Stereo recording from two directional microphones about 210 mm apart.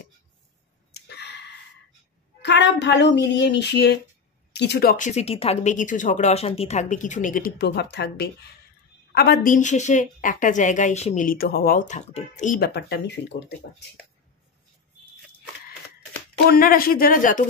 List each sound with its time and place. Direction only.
0.9 s a sound: 50° left (ahead or behind)
2.4 s speech: 55° left (ahead or behind); by 12.5 s 35° left (ahead or behind)
12.5 s speech: 50° left (ahead or behind)
16.4 s speech: 45° left (ahead or behind)